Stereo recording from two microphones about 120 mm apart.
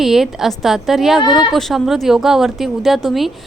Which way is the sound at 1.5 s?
Centre (ahead or behind).